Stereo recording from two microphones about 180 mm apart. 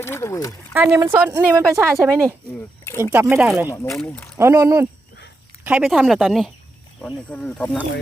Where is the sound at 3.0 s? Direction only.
10° right (ahead or behind).